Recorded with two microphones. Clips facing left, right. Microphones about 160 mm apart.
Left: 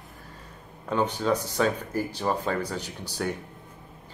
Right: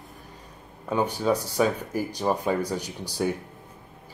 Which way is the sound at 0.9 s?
10° right (ahead or behind).